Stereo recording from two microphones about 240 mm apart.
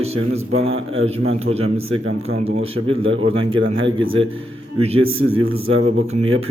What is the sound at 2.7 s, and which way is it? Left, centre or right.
Speech, right.